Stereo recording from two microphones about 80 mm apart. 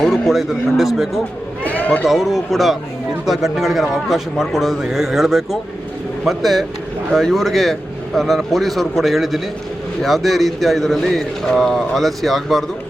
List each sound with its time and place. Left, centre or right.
0.0 s speech: centre
1.6 s cat: centre
2.0 s speech: centre